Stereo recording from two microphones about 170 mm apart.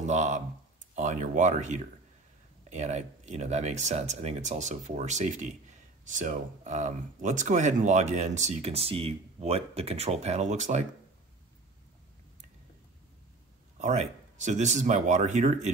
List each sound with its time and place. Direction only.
0.0 s speech: 45° right (ahead or behind)
13.7 s speech: 45° right (ahead or behind)